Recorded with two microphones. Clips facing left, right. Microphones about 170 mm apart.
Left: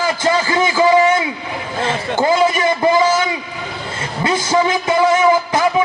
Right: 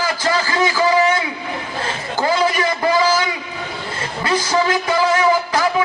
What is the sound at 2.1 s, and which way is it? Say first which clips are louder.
A man's voice: left 3 dB; 20° left (ahead or behind).